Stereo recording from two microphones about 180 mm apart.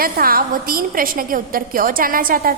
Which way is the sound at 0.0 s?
55° right (ahead or behind).